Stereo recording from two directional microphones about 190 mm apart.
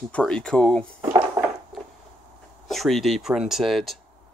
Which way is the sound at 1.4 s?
15° right (ahead or behind).